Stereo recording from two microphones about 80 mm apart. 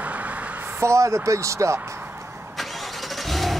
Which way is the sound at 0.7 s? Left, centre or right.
Right.